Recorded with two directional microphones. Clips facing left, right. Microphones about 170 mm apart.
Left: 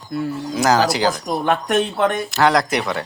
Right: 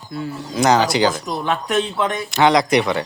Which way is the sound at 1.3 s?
50° left (ahead or behind).